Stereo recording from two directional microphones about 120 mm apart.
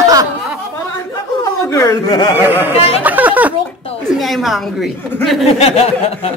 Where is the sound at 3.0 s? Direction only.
15° right (ahead or behind).